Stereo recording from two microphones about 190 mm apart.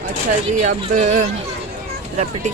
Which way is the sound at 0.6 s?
40° right (ahead or behind).